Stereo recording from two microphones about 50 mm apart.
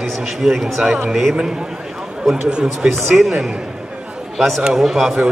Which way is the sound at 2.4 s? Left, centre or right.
Centre.